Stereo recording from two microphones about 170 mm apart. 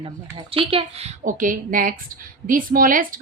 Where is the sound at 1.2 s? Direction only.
50° right (ahead or behind).